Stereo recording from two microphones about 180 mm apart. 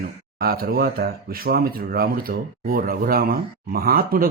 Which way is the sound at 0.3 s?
55° right (ahead or behind).